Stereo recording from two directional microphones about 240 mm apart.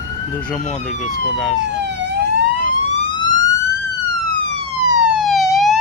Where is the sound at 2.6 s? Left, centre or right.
Left.